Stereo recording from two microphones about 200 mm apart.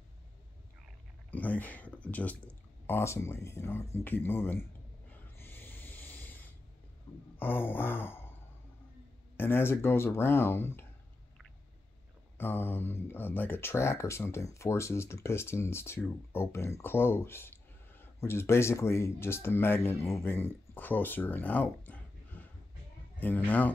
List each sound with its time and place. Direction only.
1.3 s speech: 10° left (ahead or behind)
5.1 s snort: 10° left (ahead or behind)
7.3 s a sound: 10° left (ahead or behind)
9.4 s speech: 10° left (ahead or behind)
12.4 s speech: 10° left (ahead or behind)